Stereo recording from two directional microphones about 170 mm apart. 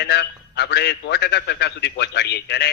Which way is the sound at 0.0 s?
80° left.